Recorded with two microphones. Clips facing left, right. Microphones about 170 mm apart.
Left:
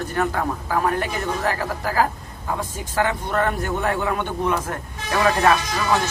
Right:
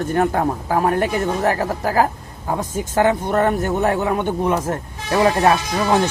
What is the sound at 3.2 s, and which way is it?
Speech, 25° right (ahead or behind).